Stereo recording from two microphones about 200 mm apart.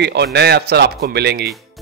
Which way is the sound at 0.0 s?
55° right (ahead or behind).